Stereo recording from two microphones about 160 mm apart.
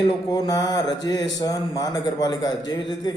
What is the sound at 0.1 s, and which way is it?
Speech, 25° left (ahead or behind).